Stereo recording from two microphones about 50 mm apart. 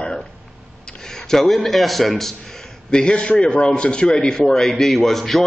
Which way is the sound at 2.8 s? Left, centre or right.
Centre.